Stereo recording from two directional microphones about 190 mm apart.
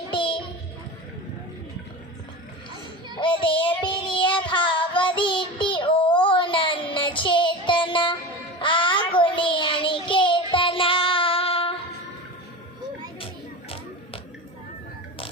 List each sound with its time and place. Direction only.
0.1 s child singing: 25° left (ahead or behind)
3.2 s child singing: 25° left (ahead or behind)
13.1 s music: 30° left (ahead or behind)